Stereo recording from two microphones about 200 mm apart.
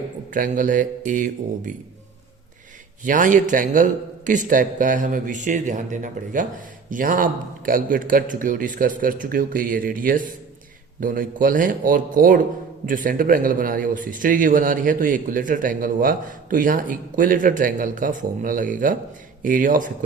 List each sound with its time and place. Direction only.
0.3 s a man's voice: 40° right (ahead or behind)
3.0 s a man's voice: 40° right (ahead or behind)